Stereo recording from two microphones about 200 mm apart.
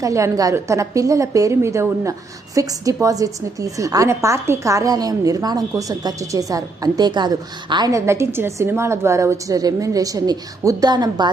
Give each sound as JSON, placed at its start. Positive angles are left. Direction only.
{"t": 0.0, "sound": "a woman's voice", "side_deg": -15}